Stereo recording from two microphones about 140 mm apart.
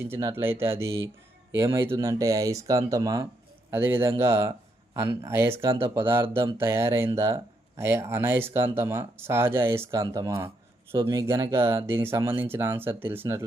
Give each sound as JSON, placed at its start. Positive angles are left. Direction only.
{"t": 0.0, "sound": "speech", "side_deg": -20}